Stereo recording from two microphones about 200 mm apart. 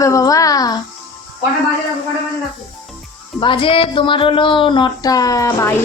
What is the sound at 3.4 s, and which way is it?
A child's voice, 25° left (ahead or behind).